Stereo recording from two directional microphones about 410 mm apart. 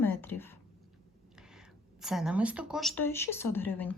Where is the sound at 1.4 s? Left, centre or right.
Centre.